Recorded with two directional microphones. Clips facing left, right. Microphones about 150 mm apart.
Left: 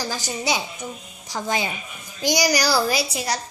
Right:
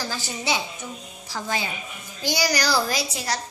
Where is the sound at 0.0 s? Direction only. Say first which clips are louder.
Left 3 dB; 15° left (ahead or behind).